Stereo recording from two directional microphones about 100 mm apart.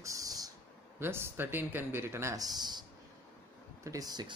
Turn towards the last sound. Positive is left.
turn(degrees=-45)  # may be behind; listen again after turning